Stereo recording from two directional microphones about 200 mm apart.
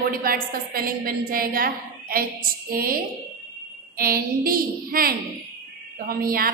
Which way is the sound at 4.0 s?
45° right (ahead or behind).